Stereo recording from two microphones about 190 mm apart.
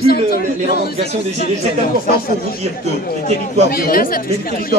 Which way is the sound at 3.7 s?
50° left (ahead or behind).